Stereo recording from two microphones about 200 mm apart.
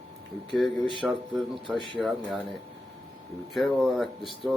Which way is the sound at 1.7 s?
25° left (ahead or behind).